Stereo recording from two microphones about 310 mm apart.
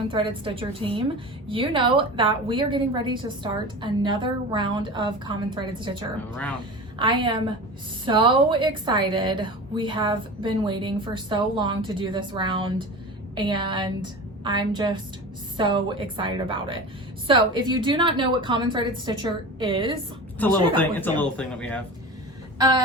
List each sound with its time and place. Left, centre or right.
0.1 s a woman's voice: centre
20.4 s speech: centre
22.5 s a sound: centre